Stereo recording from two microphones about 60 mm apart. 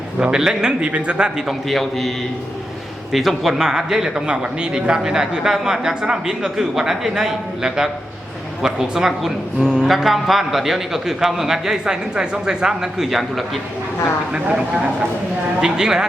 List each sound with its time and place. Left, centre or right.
0.2 s speech: centre
1.5 s a man's voice: centre
14.3 s speech: centre